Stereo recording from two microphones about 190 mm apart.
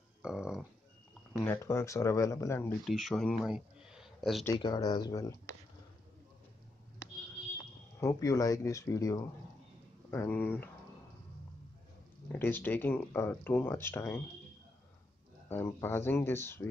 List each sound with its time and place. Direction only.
0.2 s a sound: 5° right (ahead or behind)
1.3 s speech: 15° left (ahead or behind)
2.9 s speech: centre (ahead or behind)
4.6 s speech: 20° left (ahead or behind)
8.0 s speech: 15° left (ahead or behind)
12.3 s speech: 10° left (ahead or behind)
15.4 s speech: 10° left (ahead or behind)